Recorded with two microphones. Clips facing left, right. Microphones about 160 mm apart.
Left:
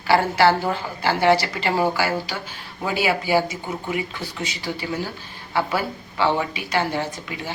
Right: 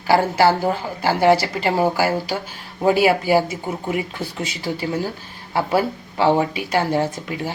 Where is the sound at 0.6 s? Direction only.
40° right (ahead or behind).